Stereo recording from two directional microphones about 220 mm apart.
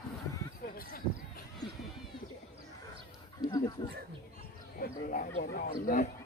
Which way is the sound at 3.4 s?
15° left (ahead or behind).